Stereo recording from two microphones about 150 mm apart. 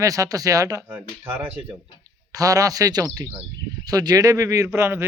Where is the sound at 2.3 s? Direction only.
25° right (ahead or behind).